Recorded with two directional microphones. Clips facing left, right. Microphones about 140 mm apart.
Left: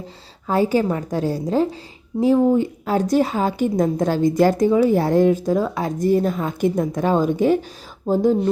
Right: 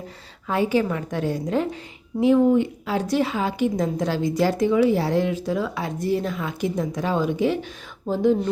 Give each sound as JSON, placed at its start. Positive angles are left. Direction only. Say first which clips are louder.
{"t": 0.4, "sound": "a woman's voice", "louder": "left 3 dB", "side_deg": 40}